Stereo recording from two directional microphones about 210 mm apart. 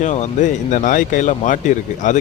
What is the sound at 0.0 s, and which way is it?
Speech, 35° left (ahead or behind).